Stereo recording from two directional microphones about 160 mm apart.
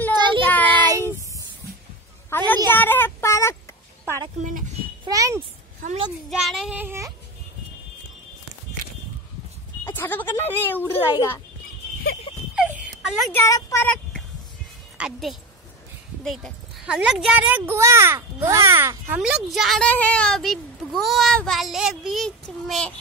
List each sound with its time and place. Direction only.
0.1 s child singing: 30° right (ahead or behind)
0.5 s child singing: 10° left (ahead or behind)
2.2 s a woman's voice: 10° left (ahead or behind)
4.4 s speech: 55° right (ahead or behind)
5.1 s a child's voice: 20° right (ahead or behind)
6.3 s a child's voice: centre (ahead or behind)
6.8 s speech: 15° right (ahead or behind)
9.8 s a child's voice: 15° left (ahead or behind)
12.5 s a sound: 10° right (ahead or behind)
13.3 s speech: 20° left (ahead or behind)
15.0 s a woman's voice: centre (ahead or behind)